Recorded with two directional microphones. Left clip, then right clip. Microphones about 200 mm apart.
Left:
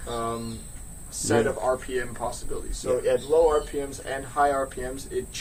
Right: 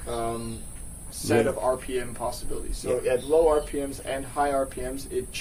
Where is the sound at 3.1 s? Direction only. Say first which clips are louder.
Even; 15° right (ahead or behind).